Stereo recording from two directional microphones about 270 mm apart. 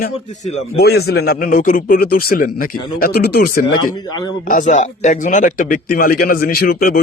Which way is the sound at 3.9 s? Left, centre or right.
Centre.